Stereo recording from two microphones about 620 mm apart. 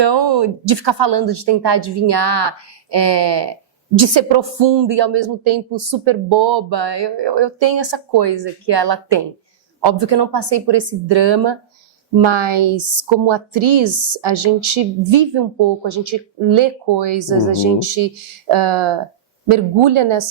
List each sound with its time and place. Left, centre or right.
0.1 s a woman's voice: right